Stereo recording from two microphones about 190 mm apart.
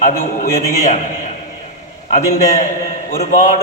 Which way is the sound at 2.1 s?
35° left (ahead or behind).